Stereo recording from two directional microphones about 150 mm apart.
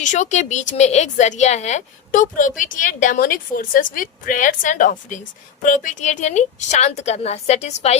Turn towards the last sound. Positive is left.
turn(degrees=50)  # may be behind; listen again after turning